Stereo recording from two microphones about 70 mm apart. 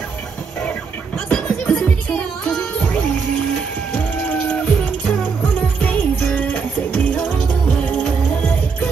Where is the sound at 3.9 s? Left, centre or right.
Centre.